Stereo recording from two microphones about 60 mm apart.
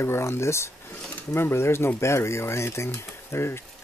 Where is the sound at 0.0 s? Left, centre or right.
Left.